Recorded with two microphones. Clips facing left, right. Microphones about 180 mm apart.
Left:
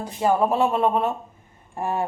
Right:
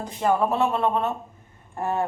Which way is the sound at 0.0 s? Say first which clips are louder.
Left 2 dB; 10° left (ahead or behind).